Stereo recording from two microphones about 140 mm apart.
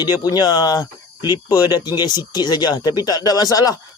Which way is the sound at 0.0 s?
30° left (ahead or behind).